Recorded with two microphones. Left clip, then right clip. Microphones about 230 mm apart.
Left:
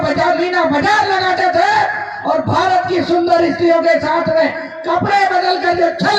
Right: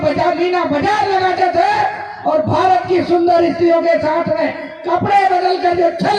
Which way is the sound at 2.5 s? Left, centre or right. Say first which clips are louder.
Even; left.